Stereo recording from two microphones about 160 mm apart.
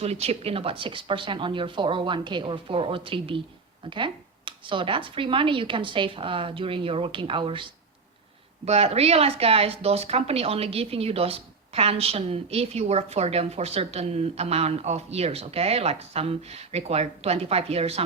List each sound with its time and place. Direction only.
0.0 s speech: 40° right (ahead or behind)